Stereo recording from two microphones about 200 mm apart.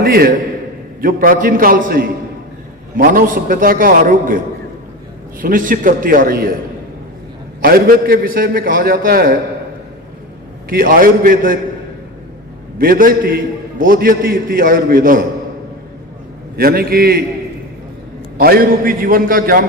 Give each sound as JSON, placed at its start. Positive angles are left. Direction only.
{"t": 0.0, "sound": "a man's voice", "side_deg": -50}
{"t": 5.4, "sound": "a man's voice", "side_deg": -45}
{"t": 7.6, "sound": "a man's voice", "side_deg": -50}
{"t": 10.7, "sound": "a man's voice", "side_deg": -45}
{"t": 12.8, "sound": "a man's voice", "side_deg": -45}
{"t": 16.6, "sound": "a man's voice", "side_deg": -50}
{"t": 18.3, "sound": "a man's voice", "side_deg": -45}